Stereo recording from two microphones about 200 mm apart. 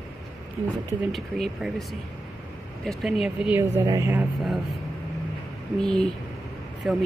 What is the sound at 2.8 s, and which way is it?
Speech, centre (ahead or behind).